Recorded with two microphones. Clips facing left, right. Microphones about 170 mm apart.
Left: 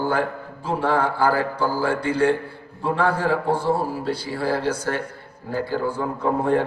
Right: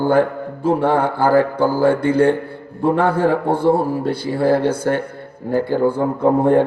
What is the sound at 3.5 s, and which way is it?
A man's voice, 55° right (ahead or behind).